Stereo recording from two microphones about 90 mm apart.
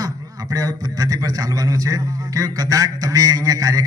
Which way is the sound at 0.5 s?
40° right (ahead or behind).